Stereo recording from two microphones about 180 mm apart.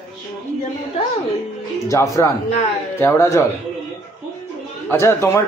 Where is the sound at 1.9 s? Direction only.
15° left (ahead or behind).